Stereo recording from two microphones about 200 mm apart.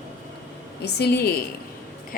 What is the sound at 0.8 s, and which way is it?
Speech, 55° left (ahead or behind).